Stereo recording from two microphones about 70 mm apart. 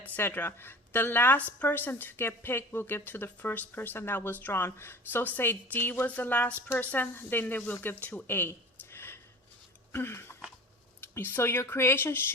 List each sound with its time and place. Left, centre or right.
0.0 s a woman's voice: left
9.9 s a sound: left
11.0 s a woman's voice: left